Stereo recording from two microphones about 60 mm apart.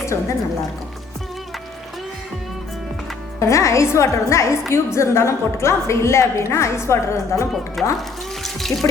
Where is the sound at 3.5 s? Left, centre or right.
Left.